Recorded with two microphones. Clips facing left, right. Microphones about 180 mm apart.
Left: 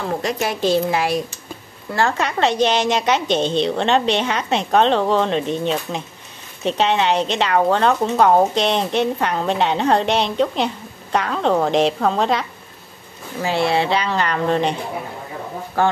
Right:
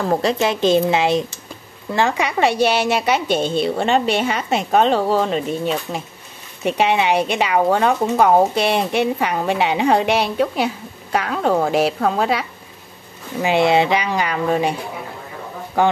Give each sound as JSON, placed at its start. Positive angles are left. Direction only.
{"t": 0.1, "sound": "a woman's voice", "side_deg": -30}
{"t": 13.4, "sound": "speech", "side_deg": -20}